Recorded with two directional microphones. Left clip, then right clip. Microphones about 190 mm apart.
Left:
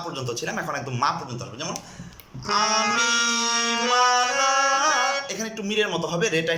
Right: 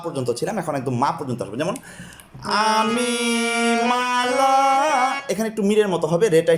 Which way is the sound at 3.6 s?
40° right (ahead or behind).